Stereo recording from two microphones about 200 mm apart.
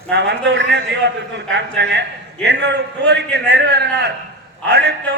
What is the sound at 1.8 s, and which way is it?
A man's voice, 60° right (ahead or behind).